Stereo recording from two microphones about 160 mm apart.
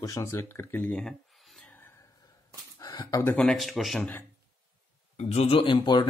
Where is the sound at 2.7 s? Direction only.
25° left (ahead or behind).